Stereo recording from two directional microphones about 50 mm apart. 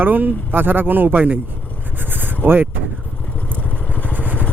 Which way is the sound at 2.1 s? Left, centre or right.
Right.